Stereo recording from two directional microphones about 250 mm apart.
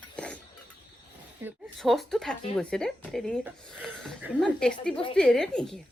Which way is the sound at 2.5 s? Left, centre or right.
Centre.